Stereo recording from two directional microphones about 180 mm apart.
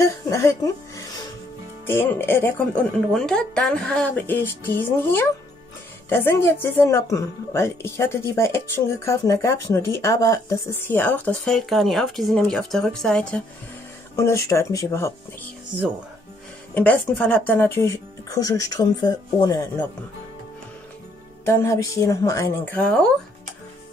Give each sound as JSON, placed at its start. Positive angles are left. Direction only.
{"t": 0.0, "sound": "a woman's voice", "side_deg": 15}
{"t": 14.1, "sound": "speech", "side_deg": 15}
{"t": 16.7, "sound": "speech", "side_deg": 10}
{"t": 21.5, "sound": "speech", "side_deg": 15}